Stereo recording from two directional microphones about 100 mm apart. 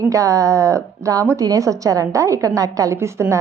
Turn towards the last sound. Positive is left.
turn(degrees=-25)  # may be behind; listen again after turning